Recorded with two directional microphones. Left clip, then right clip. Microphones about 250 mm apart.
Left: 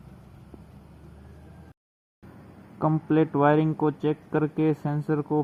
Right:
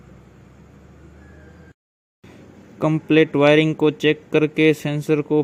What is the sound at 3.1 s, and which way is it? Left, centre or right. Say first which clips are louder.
Speech: right 7 dB; right.